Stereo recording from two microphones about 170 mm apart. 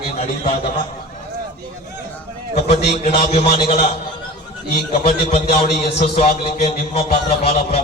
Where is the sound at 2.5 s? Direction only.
35° left (ahead or behind).